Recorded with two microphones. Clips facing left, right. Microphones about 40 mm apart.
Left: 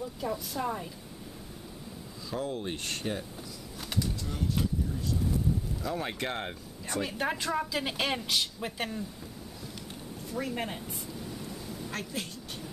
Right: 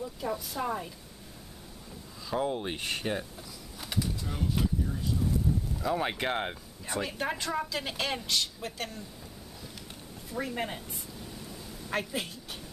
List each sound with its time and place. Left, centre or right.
0.2 s speech: centre
2.3 s speech: right
7.0 s a woman's voice: centre
10.3 s a sound: centre
11.9 s a woman's voice: centre